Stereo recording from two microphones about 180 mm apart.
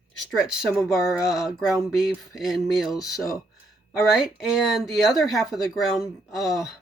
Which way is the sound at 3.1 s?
20° left (ahead or behind).